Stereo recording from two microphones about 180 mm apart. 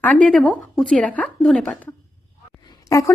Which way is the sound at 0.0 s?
5° left (ahead or behind).